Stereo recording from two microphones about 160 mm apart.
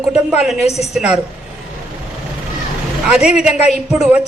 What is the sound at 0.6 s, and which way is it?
Speech, 40° left (ahead or behind).